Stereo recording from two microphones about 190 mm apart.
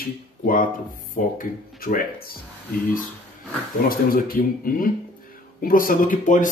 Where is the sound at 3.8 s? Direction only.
50° left (ahead or behind).